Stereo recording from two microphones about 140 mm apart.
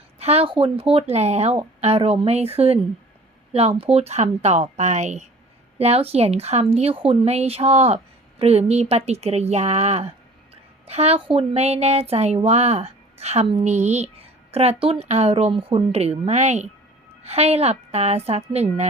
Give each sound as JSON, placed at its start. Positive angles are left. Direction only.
{"t": 0.2, "sound": "a woman's voice", "side_deg": -45}
{"t": 3.8, "sound": "a woman's voice", "side_deg": -45}